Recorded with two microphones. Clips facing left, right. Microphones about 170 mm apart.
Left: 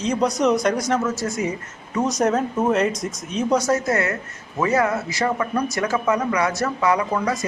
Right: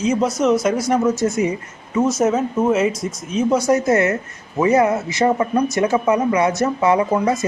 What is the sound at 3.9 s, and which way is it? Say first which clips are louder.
Speech: right 6 dB; 20° right (ahead or behind).